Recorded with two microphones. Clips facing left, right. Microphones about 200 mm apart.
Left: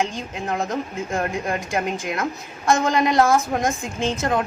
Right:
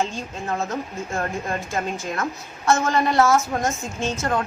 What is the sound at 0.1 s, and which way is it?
A woman's voice, 15° left (ahead or behind).